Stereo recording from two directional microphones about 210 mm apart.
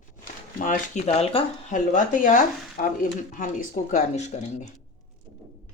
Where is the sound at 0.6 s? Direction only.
35° left (ahead or behind).